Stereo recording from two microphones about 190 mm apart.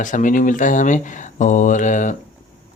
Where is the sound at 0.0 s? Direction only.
40° left (ahead or behind).